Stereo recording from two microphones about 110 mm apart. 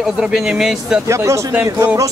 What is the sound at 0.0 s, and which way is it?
Speech, 5° right (ahead or behind).